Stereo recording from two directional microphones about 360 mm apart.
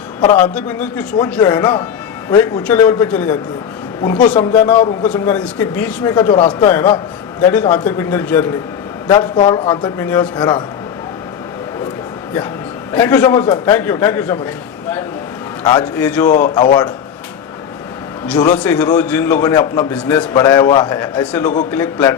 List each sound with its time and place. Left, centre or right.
0.2 s a man's voice: centre
5.1 s a man's voice: centre
12.9 s a man's voice: centre
15.6 s a man's voice: centre
16.3 s speech: left
18.6 s a man's voice: centre